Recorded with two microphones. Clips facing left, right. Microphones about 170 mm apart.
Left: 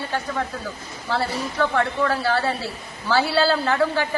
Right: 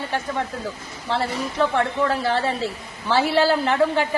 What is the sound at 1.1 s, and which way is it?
A woman's voice, 20° right (ahead or behind).